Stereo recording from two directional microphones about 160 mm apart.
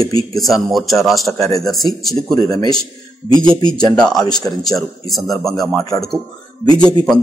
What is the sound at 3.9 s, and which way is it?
Speech, 5° left (ahead or behind).